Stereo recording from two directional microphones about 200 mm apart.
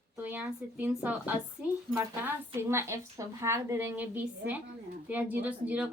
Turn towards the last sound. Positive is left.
turn(degrees=-10)  # may be behind; listen again after turning